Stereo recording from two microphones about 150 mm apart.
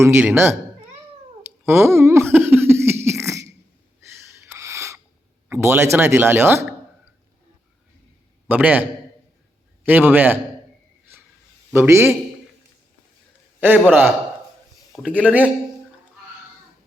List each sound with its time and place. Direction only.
0.0 s speech: 15° right (ahead or behind)
1.6 s a sound: 15° right (ahead or behind)
5.5 s speech: 15° right (ahead or behind)
8.4 s speech: 10° right (ahead or behind)
11.7 s speech: 15° right (ahead or behind)
13.6 s speech: 10° right (ahead or behind)